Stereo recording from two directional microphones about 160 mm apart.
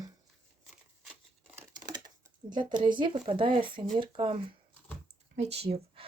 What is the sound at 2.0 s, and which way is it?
Speech, 25° right (ahead or behind).